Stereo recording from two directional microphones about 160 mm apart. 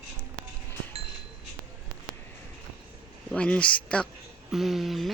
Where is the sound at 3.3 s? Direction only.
5° left (ahead or behind).